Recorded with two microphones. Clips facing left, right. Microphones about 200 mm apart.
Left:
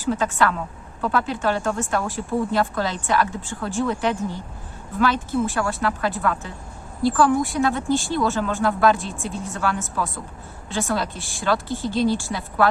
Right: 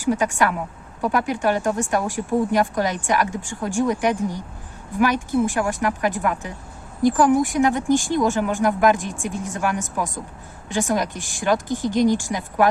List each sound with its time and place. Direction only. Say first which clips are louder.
0.0 s speech: right 1 dB; 15° right (ahead or behind)